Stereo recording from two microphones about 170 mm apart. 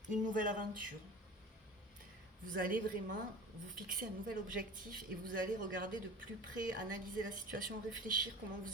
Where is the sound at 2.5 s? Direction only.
55° right (ahead or behind).